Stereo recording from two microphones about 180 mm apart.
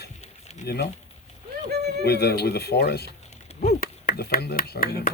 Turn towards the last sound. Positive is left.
turn(degrees=60)  # may be behind; listen again after turning